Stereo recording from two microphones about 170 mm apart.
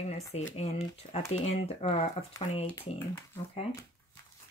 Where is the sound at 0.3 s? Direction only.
40° left (ahead or behind).